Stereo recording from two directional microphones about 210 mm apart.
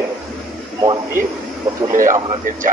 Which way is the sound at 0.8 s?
20° right (ahead or behind).